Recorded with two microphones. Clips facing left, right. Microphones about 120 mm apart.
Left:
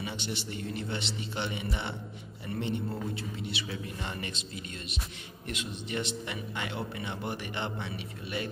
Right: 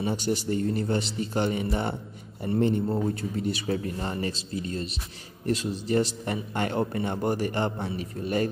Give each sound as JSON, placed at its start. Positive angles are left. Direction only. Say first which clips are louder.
{"t": 0.0, "sound": "a man's voice", "louder": "right 10 dB", "side_deg": -40}